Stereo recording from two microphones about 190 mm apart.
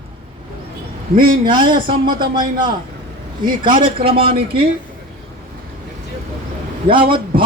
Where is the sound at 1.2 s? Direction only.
25° right (ahead or behind).